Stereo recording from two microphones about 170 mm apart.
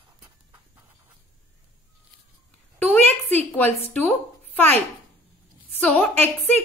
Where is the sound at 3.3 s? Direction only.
10° left (ahead or behind).